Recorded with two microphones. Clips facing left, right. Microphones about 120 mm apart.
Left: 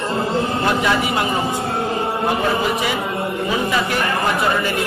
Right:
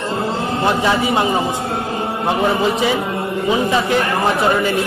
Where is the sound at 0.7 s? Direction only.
25° right (ahead or behind).